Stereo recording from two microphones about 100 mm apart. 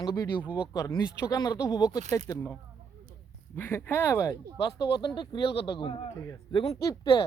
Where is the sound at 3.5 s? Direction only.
25° left (ahead or behind).